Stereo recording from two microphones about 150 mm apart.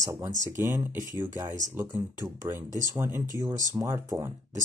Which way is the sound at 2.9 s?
15° right (ahead or behind).